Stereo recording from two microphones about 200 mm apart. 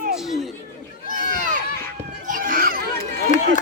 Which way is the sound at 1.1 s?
40° right (ahead or behind).